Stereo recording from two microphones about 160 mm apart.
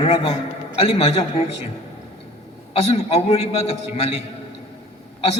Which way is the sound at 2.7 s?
40° left (ahead or behind).